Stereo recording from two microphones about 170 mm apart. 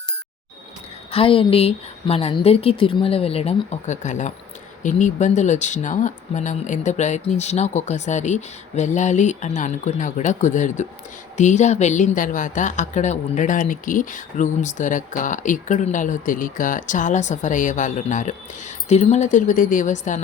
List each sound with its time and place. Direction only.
1.1 s a woman's voice: 35° left (ahead or behind)